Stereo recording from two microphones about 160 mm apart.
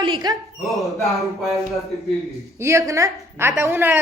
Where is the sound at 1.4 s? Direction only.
Centre (ahead or behind).